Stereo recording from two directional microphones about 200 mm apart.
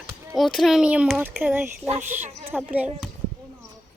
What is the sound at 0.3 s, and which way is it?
Speech, centre (ahead or behind).